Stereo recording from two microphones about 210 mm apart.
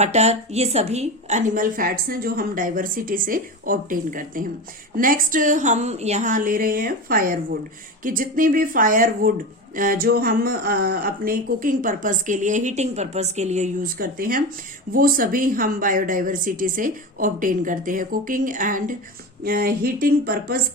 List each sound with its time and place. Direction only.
0.0 s speech: 30° right (ahead or behind)